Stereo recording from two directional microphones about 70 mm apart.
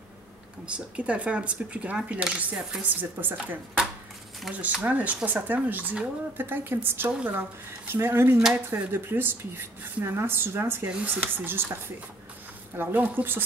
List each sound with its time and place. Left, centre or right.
0.7 s speech: centre
4.5 s speech: right
12.7 s speech: right